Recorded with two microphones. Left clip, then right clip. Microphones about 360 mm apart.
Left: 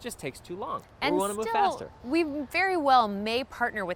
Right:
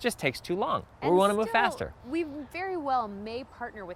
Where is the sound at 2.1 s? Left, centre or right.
Left.